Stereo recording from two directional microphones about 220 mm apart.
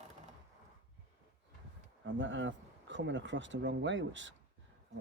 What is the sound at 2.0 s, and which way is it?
Speech, 60° right (ahead or behind).